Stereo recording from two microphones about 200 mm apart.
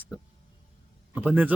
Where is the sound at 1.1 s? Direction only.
10° right (ahead or behind).